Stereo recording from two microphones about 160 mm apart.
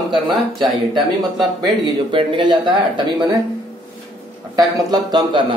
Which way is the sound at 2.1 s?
30° right (ahead or behind).